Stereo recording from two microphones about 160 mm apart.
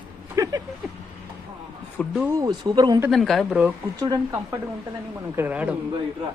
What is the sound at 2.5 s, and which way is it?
Speech, 25° right (ahead or behind).